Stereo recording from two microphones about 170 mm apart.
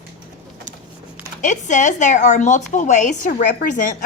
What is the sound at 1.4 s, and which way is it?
Speech, 45° left (ahead or behind).